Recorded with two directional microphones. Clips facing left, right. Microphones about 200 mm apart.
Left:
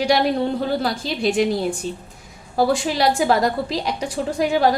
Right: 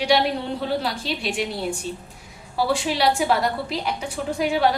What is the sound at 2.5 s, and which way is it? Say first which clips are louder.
A woman's voice: left 4 dB; 45° left (ahead or behind).